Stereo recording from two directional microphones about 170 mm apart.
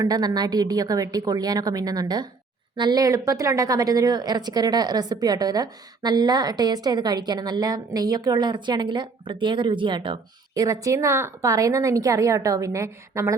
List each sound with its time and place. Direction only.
0.0 s a woman's voice: 20° right (ahead or behind)